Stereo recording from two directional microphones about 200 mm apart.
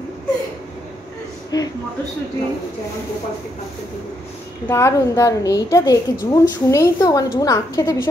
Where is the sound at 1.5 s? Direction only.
20° left (ahead or behind).